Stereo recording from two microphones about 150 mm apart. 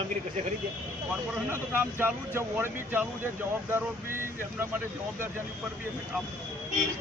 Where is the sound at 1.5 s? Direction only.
15° right (ahead or behind).